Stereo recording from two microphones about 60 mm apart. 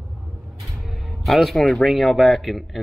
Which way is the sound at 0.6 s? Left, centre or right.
Centre.